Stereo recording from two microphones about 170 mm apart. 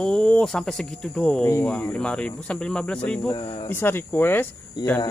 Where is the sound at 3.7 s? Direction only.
15° left (ahead or behind).